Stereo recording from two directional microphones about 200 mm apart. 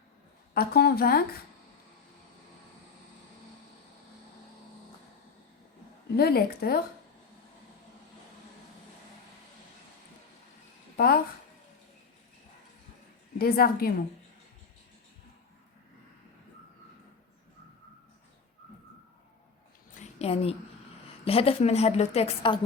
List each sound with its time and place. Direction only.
0.5 s a woman's voice: 50° left (ahead or behind)
6.1 s a woman's voice: 50° left (ahead or behind)
10.9 s a woman's voice: 45° left (ahead or behind)
13.4 s a woman's voice: 50° left (ahead or behind)
20.0 s a sound: 30° left (ahead or behind)
21.2 s a woman's voice: 30° left (ahead or behind)